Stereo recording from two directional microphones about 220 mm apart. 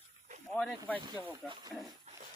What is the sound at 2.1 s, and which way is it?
Dog, 30° right (ahead or behind).